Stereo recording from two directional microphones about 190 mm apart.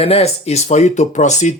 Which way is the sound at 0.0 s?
35° left (ahead or behind).